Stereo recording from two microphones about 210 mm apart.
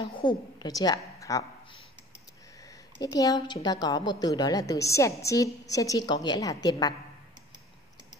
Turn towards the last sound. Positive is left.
turn(degrees=20)  # may be behind; listen again after turning